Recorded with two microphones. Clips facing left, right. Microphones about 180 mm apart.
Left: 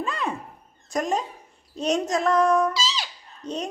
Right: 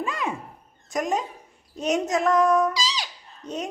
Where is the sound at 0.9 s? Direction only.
Centre (ahead or behind).